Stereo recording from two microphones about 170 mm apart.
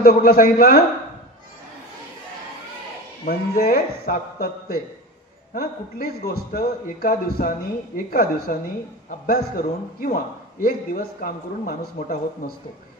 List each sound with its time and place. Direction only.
0.0 s a man's voice: 60° left (ahead or behind)
3.3 s a man's voice: 65° left (ahead or behind)